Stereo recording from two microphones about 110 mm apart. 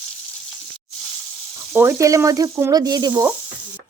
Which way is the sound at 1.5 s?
20° right (ahead or behind).